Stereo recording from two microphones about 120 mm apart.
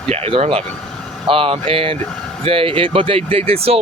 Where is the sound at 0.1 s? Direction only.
55° right (ahead or behind).